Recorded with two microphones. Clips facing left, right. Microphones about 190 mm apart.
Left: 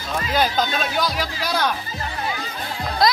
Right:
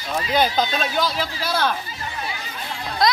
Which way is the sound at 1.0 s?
15° left (ahead or behind).